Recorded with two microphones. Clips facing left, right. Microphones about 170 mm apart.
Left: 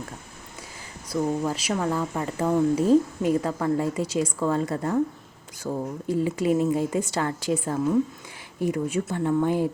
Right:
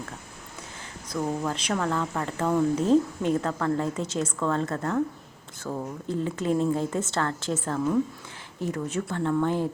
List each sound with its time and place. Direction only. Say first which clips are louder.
1.1 s speech: left 3 dB; 10° left (ahead or behind)
5.7 s speech: left 3 dB; 20° left (ahead or behind)
6.1 s speech: left 4 dB; 10° left (ahead or behind)